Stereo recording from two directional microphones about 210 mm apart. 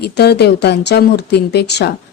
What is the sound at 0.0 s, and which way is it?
Speech, 50° left (ahead or behind).